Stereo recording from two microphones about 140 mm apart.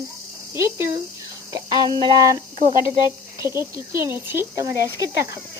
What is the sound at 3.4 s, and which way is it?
Speech, 20° right (ahead or behind).